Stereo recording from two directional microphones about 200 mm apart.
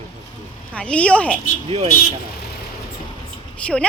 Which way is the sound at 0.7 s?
5° left (ahead or behind).